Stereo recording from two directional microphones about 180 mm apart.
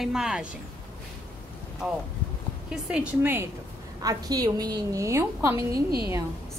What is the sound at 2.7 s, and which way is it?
Speech, 5° right (ahead or behind).